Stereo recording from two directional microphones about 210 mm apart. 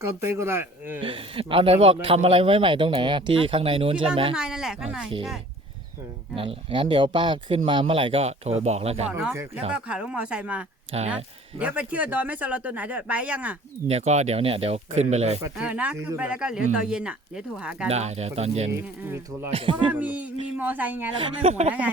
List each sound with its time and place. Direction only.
0.0 s speech: 10° right (ahead or behind)
1.0 s speech: 25° right (ahead or behind)
4.4 s speech: 5° right (ahead or behind)
6.3 s speech: 25° right (ahead or behind)
9.0 s speech: 5° right (ahead or behind)
10.9 s speech: 30° right (ahead or behind)
11.6 s speech: 5° right (ahead or behind)
13.8 s speech: 30° right (ahead or behind)
15.5 s speech: 5° right (ahead or behind)
17.8 s speech: 30° right (ahead or behind)
18.7 s speech: 10° right (ahead or behind)
19.5 s speech: 25° right (ahead or behind)
19.9 s speech: 5° right (ahead or behind)